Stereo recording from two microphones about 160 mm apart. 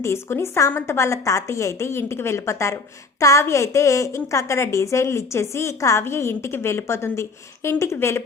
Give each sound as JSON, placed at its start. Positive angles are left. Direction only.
{"t": 0.0, "sound": "a woman's voice", "side_deg": 15}